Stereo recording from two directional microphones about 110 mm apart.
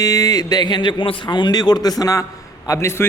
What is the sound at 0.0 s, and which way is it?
A man's voice, 35° left (ahead or behind).